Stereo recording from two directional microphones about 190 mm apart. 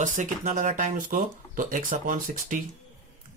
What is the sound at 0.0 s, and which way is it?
Speech, 40° right (ahead or behind).